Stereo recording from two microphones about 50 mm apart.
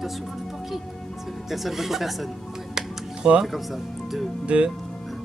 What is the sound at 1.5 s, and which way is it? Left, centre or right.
Speech, centre.